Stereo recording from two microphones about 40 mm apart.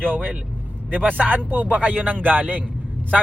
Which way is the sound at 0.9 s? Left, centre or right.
Right.